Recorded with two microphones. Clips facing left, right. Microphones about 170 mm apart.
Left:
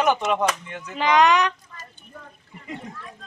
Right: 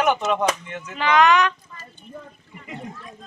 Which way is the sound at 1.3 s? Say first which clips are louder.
Right 2 dB; 35° left (ahead or behind).